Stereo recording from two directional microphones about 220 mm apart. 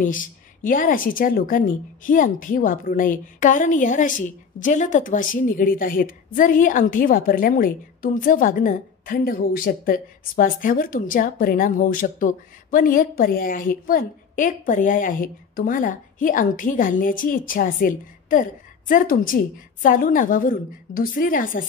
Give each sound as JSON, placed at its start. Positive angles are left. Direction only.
{"t": 0.0, "sound": "a woman's voice", "side_deg": 35}